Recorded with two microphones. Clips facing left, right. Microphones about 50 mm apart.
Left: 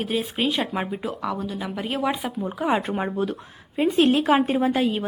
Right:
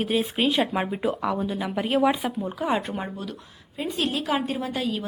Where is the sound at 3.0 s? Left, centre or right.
Left.